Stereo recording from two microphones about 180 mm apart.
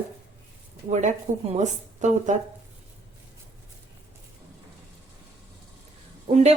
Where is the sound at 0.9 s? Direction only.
40° right (ahead or behind).